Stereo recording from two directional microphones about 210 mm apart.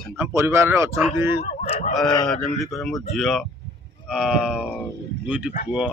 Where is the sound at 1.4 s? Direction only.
30° left (ahead or behind).